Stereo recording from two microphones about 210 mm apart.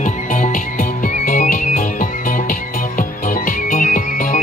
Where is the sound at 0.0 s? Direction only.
35° left (ahead or behind).